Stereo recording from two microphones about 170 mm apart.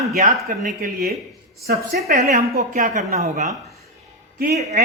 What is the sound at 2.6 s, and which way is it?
Speech, 50° right (ahead or behind).